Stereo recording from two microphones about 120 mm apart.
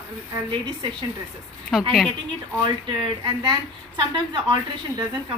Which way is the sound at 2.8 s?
40° right (ahead or behind).